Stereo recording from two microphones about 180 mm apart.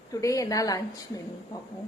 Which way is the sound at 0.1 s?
20° left (ahead or behind).